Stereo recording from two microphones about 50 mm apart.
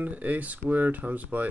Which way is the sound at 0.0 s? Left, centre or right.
Right.